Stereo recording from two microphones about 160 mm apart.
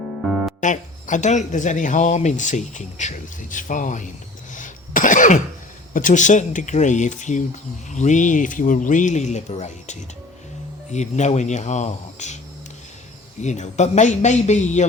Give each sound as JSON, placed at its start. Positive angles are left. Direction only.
{"t": 0.3, "sound": "music", "side_deg": -5}
{"t": 0.6, "sound": "speech", "side_deg": 50}
{"t": 4.5, "sound": "cough", "side_deg": 55}
{"t": 5.9, "sound": "speech", "side_deg": 55}
{"t": 13.4, "sound": "speech", "side_deg": 45}